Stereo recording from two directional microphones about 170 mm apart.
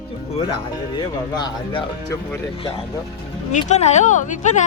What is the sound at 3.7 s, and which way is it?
Speech, 40° left (ahead or behind).